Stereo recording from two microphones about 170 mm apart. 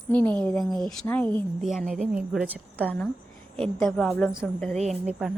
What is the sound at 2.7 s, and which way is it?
A woman's voice, 10° left (ahead or behind).